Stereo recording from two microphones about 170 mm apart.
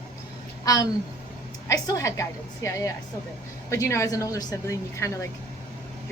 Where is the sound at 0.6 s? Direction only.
20° left (ahead or behind).